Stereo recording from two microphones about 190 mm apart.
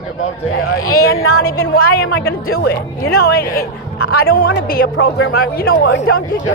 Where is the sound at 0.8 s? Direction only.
90° left.